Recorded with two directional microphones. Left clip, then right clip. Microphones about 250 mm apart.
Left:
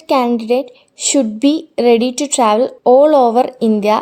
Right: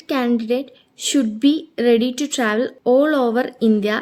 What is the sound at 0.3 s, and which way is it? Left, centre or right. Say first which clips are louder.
A woman's voice: left 6 dB; centre.